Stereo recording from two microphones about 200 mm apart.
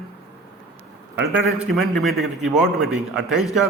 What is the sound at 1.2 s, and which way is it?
A man's voice, 5° right (ahead or behind).